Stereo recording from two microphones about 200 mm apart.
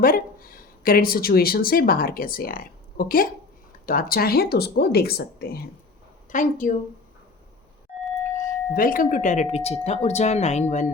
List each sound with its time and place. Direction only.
0.0 s speech: 45° left (ahead or behind)
6.3 s speech: 40° left (ahead or behind)
8.7 s speech: 45° left (ahead or behind)